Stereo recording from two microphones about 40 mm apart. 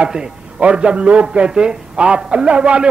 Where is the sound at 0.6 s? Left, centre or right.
Right.